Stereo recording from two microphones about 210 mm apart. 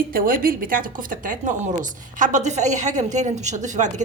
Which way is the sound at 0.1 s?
45° right (ahead or behind).